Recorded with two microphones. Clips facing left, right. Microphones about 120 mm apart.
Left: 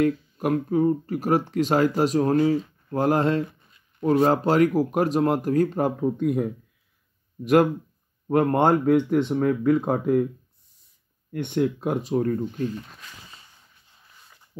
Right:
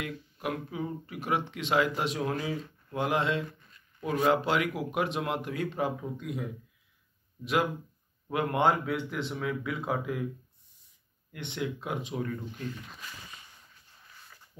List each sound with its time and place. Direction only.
0.0 s speech: 45° left (ahead or behind)
11.3 s speech: 45° left (ahead or behind)